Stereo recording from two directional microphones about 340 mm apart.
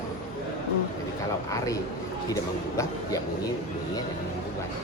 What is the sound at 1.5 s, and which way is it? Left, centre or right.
A man's voice, centre.